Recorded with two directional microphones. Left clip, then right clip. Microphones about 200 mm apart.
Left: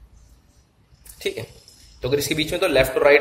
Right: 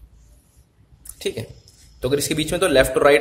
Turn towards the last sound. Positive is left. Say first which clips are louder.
# right 1 dB
turn(degrees=-40)  # may be behind; listen again after turning